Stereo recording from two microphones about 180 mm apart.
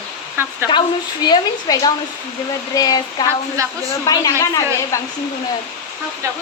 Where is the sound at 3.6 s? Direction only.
20° right (ahead or behind).